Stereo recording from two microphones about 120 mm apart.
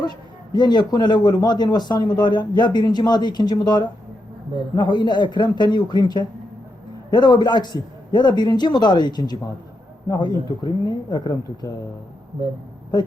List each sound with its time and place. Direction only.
0.5 s speech: 35° left (ahead or behind)